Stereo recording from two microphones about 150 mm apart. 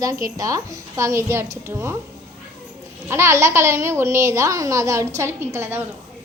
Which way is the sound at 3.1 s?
20° right (ahead or behind).